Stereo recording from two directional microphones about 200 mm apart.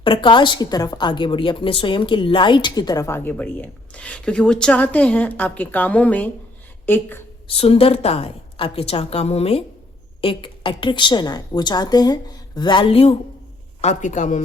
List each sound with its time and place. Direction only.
0.0 s a woman's voice: 25° left (ahead or behind)
7.4 s a woman's voice: 30° left (ahead or behind)